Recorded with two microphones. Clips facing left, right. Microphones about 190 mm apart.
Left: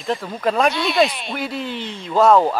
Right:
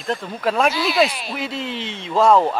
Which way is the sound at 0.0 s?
Centre (ahead or behind).